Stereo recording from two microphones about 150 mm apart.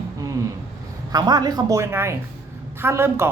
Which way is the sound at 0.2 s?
20° right (ahead or behind).